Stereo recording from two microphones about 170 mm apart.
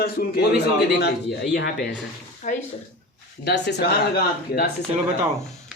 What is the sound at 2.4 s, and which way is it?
Speech, 45° left (ahead or behind).